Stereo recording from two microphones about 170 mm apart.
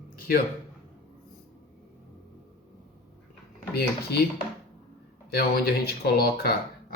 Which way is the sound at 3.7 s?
70° left (ahead or behind).